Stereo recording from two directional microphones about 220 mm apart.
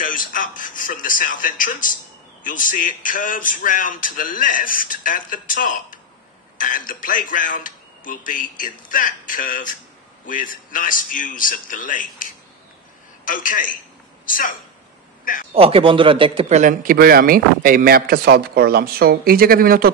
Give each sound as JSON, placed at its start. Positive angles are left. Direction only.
{"t": 0.0, "sound": "a woman's voice", "side_deg": 40}
{"t": 15.5, "sound": "a man's voice", "side_deg": -25}